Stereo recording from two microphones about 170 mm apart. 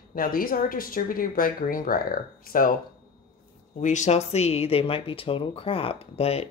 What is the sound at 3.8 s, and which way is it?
Speech, 45° left (ahead or behind).